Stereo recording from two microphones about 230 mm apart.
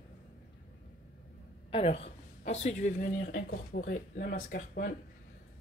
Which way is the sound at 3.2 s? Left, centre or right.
Left.